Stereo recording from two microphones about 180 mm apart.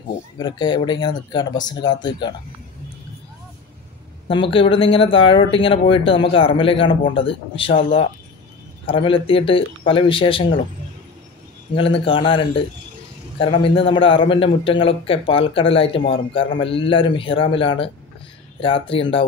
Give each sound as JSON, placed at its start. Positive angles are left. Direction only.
{"t": 0.4, "sound": "speech", "side_deg": 25}
{"t": 4.3, "sound": "speech", "side_deg": 30}
{"t": 11.7, "sound": "speech", "side_deg": 30}